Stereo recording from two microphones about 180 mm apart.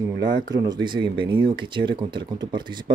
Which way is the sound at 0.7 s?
25° right (ahead or behind).